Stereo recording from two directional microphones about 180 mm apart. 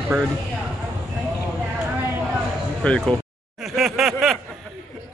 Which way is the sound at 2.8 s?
5° left (ahead or behind).